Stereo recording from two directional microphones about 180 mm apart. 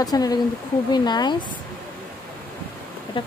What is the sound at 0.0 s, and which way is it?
Speech, 20° left (ahead or behind).